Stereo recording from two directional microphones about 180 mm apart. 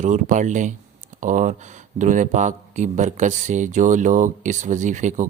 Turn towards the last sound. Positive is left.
turn(degrees=-45)  # may be behind; listen again after turning